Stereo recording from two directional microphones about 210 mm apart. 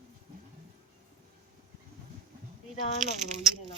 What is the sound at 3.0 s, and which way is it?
Speech, 35° right (ahead or behind).